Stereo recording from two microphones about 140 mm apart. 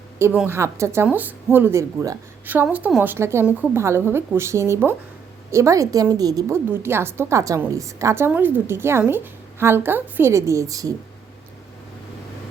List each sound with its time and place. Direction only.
0.2 s a woman's voice: 15° right (ahead or behind)